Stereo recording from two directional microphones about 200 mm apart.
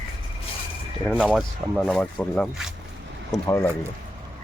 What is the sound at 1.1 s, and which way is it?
Speech, 5° right (ahead or behind).